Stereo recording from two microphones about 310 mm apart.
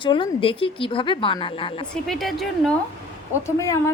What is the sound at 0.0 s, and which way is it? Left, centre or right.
A woman's voice, centre.